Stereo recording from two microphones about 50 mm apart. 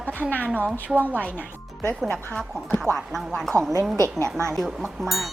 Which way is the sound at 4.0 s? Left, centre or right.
Right.